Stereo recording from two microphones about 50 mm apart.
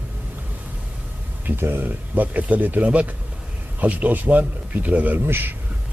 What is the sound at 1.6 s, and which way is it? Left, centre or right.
Speech, right.